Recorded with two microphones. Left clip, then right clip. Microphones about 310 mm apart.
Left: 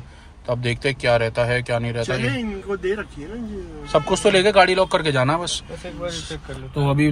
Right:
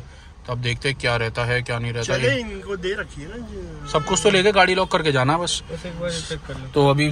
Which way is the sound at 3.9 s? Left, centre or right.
Centre.